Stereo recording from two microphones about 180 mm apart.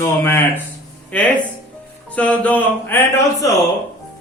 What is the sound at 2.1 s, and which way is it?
A man's voice, 10° left (ahead or behind).